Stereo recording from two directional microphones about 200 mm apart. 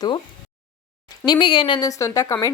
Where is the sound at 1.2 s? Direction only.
25° left (ahead or behind).